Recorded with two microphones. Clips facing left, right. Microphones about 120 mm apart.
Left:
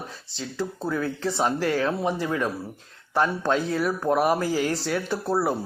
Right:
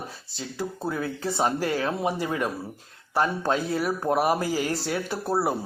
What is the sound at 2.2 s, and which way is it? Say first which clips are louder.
Speech: left 1 dB; 15° right (ahead or behind).